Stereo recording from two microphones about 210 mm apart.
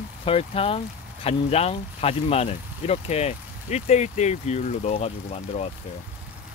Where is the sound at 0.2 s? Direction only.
25° left (ahead or behind).